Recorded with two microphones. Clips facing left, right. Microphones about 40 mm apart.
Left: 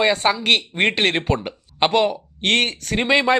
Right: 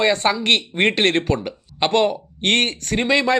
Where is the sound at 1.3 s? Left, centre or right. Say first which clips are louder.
Even; left.